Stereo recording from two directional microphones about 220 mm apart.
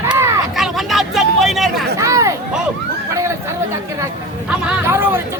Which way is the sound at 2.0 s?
15° right (ahead or behind).